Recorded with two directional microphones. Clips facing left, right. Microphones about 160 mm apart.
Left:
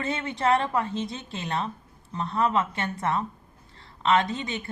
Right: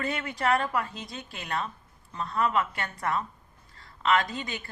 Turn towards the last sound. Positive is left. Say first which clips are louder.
# left 4 dB
turn(degrees=20)  # may be behind; listen again after turning